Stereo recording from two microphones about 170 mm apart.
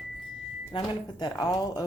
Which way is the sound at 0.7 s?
25° left (ahead or behind).